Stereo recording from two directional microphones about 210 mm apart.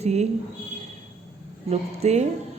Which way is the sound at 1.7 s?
30° right (ahead or behind).